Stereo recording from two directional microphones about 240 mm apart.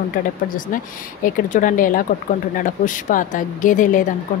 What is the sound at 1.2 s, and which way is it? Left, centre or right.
Speech, left.